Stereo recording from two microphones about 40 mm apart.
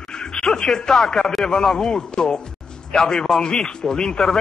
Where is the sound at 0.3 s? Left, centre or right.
Centre.